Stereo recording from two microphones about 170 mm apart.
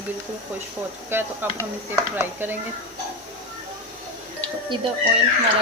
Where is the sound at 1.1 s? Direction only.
10° right (ahead or behind).